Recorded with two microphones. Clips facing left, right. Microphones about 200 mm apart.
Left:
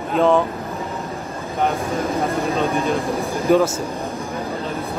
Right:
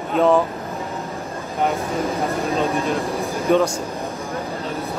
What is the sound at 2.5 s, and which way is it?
Speech, centre (ahead or behind).